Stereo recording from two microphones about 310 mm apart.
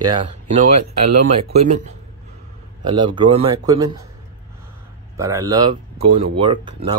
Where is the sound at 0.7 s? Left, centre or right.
Right.